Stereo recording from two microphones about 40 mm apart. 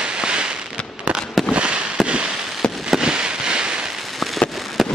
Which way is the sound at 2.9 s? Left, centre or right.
Centre.